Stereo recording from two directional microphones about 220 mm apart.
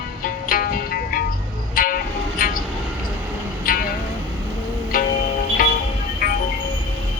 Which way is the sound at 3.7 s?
40° left (ahead or behind).